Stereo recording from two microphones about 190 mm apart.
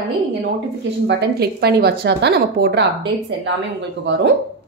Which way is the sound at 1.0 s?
55° right (ahead or behind).